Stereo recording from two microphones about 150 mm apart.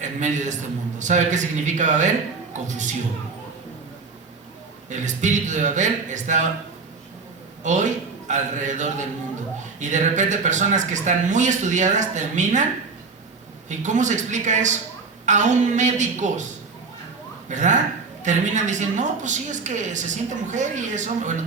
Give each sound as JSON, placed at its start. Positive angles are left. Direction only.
{"t": 0.0, "sound": "a woman's voice", "side_deg": -55}
{"t": 4.9, "sound": "a woman's voice", "side_deg": -55}
{"t": 7.6, "sound": "a woman's voice", "side_deg": -55}
{"t": 13.7, "sound": "a woman's voice", "side_deg": -55}
{"t": 17.5, "sound": "a woman's voice", "side_deg": -55}